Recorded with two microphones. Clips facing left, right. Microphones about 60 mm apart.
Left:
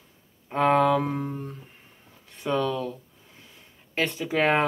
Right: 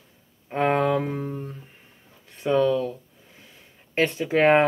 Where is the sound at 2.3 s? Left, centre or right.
Centre.